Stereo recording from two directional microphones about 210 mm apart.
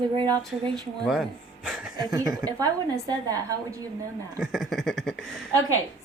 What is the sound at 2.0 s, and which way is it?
A woman's voice, 20° right (ahead or behind).